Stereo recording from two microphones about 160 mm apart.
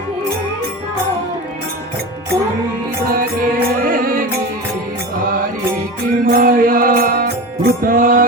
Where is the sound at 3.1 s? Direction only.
65° right (ahead or behind).